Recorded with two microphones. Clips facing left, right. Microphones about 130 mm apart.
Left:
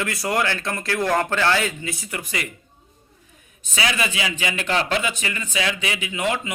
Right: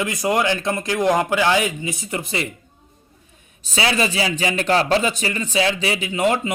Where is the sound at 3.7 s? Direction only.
30° right (ahead or behind).